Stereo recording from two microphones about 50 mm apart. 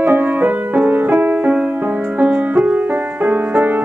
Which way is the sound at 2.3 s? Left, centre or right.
Right.